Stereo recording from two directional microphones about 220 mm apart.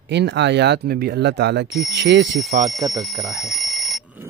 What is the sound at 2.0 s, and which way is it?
Speech, 50° right (ahead or behind).